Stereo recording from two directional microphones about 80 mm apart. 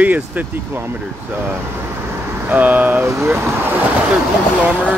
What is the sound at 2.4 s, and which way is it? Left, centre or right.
Speech, right.